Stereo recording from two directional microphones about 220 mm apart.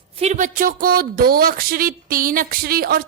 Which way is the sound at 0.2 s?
35° right (ahead or behind).